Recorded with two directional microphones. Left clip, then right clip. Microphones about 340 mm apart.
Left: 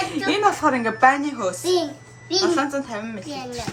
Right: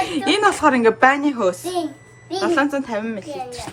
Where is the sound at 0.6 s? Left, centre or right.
Right.